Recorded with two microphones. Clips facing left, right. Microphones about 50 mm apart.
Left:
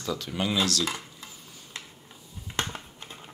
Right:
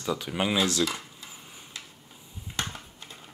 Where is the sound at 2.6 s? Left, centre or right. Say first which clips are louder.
Left 2 dB; left.